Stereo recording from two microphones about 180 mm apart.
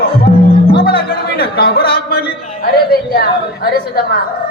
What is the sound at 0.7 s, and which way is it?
Music, 60° left (ahead or behind).